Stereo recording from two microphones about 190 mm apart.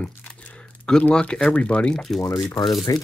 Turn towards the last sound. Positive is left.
turn(degrees=20)  # may be behind; listen again after turning